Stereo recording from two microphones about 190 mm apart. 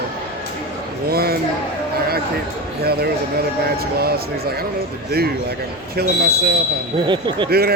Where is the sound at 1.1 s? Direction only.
55° right (ahead or behind).